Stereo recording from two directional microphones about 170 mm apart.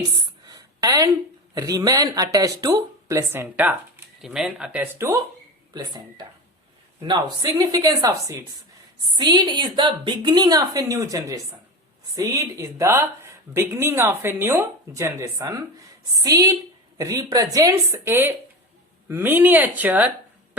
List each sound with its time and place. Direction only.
0.4 s a sound: 20° right (ahead or behind)
1.5 s speech: 20° right (ahead or behind)
7.6 s speech: 20° right (ahead or behind)